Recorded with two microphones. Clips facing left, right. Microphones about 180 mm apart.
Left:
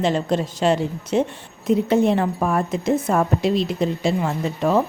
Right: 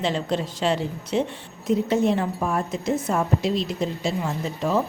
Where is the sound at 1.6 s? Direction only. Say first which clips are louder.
Left 3 dB; 60° left (ahead or behind).